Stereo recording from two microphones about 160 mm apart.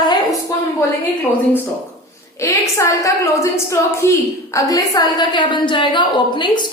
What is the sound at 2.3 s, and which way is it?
A woman's voice, 20° left (ahead or behind).